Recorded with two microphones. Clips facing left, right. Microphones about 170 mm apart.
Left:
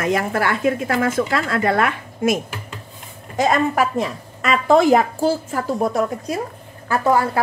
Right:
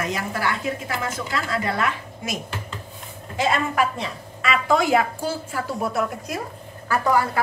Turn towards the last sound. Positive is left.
turn(degrees=25)  # may be behind; listen again after turning